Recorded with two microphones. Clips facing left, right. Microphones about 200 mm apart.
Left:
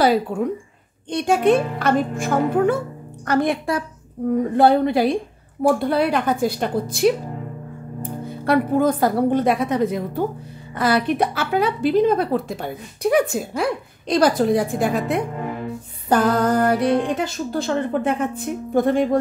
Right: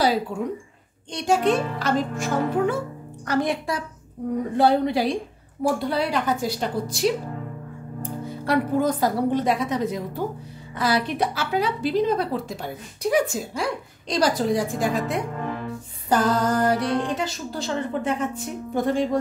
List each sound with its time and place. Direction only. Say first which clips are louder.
0.3 s a woman's voice: left 5 dB; 55° left (ahead or behind)
8.5 s speech: left 4 dB; 55° left (ahead or behind)
15.4 s music: left 2 dB; 10° left (ahead or behind)
16.1 s speech: left 3 dB; 55° left (ahead or behind)